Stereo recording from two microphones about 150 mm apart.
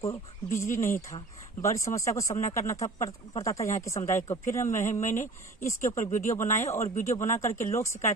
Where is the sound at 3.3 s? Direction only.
20° left (ahead or behind).